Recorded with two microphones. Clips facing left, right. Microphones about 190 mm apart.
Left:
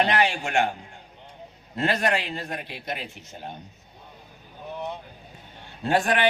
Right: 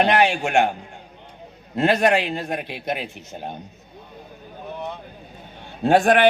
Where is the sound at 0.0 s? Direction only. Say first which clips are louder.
Right 5 dB; 60° right (ahead or behind).